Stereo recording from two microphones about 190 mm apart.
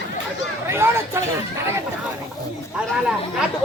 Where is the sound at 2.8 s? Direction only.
5° right (ahead or behind).